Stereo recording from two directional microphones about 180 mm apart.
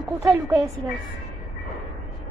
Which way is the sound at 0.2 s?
20° right (ahead or behind).